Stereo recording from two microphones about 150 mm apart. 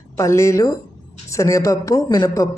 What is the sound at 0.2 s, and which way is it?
Speech, 20° left (ahead or behind).